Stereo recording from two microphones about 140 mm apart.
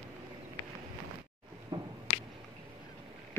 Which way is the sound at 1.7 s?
30° right (ahead or behind).